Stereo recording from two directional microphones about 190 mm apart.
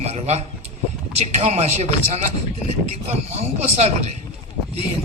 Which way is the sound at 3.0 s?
35° right (ahead or behind).